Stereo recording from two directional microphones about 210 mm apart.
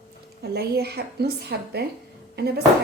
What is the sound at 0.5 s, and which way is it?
Speech, 50° right (ahead or behind).